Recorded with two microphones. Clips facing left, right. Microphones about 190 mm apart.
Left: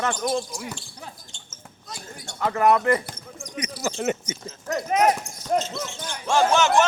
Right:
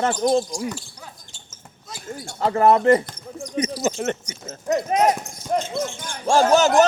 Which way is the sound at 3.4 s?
30° right (ahead or behind).